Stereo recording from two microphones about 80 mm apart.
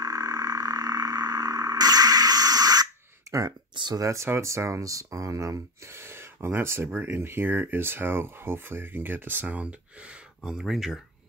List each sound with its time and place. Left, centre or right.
0.0 s frog: right
3.9 s speech: right; by 11.0 s centre